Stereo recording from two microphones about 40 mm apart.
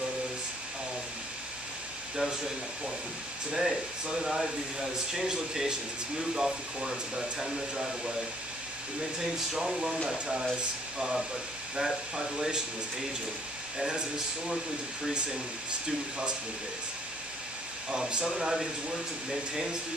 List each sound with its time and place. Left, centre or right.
2.1 s speech: centre
3.5 s speech: centre
10.1 s speech: centre
11.7 s speech: centre
13.7 s speech: centre
17.9 s speech: right